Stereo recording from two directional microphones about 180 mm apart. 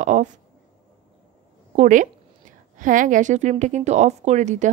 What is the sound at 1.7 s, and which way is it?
A woman's voice, 45° right (ahead or behind).